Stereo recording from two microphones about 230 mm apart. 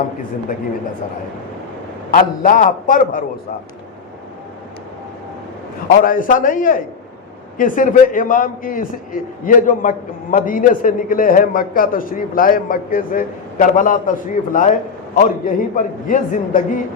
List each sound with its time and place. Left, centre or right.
2.0 s a man's voice: left
6.1 s a man's voice: left